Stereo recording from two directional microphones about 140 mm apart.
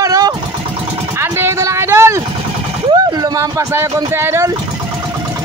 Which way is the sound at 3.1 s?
25° right (ahead or behind).